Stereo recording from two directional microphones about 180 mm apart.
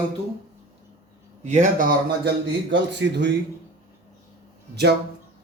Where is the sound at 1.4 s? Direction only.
40° right (ahead or behind).